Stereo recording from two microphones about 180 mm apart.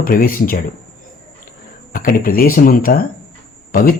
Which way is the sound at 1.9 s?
50° left (ahead or behind).